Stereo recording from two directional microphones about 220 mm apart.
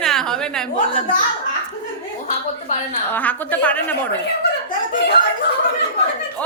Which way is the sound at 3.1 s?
5° left (ahead or behind).